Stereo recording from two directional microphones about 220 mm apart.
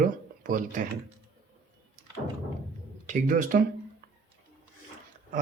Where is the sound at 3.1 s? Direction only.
35° right (ahead or behind).